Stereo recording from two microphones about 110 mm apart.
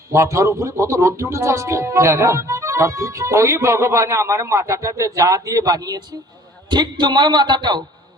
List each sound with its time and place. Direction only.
0.1 s a man's voice: 25° right (ahead or behind); by 7.9 s 40° right (ahead or behind)